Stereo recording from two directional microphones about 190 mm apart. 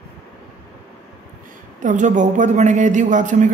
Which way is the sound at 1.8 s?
40° right (ahead or behind).